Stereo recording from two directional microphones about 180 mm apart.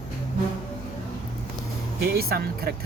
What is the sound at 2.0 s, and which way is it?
Speech, 60° right (ahead or behind).